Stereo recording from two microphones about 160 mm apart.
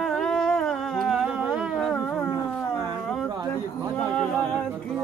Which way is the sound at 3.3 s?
25° right (ahead or behind).